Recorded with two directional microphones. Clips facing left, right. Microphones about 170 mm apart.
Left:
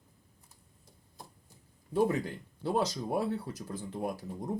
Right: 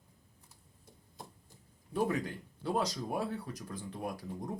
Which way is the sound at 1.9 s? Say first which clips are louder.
Left 4 dB; 25° left (ahead or behind).